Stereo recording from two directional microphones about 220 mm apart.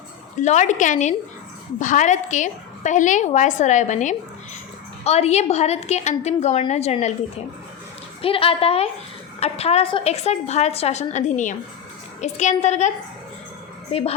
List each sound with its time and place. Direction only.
0.4 s a woman's voice: 35° left (ahead or behind)
8.2 s a woman's voice: 25° left (ahead or behind)
13.9 s a woman's voice: 25° left (ahead or behind)